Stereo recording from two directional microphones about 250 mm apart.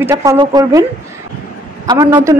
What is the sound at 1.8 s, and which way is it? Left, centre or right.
Speech, centre.